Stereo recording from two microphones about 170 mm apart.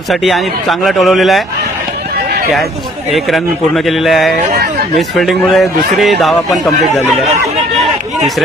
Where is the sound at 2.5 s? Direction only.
Centre (ahead or behind).